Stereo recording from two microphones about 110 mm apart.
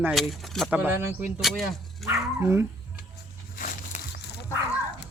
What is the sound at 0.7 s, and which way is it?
Speech, 20° right (ahead or behind).